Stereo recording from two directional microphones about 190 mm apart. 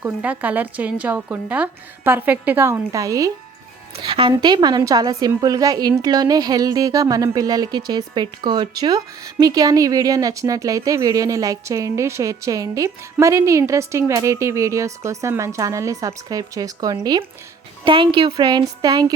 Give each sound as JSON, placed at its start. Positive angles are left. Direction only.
{"t": 0.0, "sound": "speech", "side_deg": -10}
{"t": 3.9, "sound": "a woman's voice", "side_deg": -30}